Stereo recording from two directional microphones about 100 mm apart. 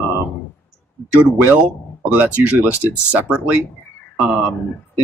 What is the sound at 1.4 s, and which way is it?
Speech, 15° right (ahead or behind).